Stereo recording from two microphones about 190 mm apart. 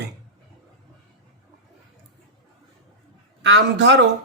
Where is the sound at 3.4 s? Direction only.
65° right (ahead or behind).